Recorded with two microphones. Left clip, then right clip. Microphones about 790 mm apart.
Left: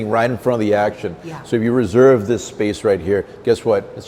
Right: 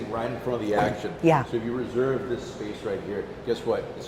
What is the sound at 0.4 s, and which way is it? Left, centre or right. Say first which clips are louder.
Speech: left 11 dB; left.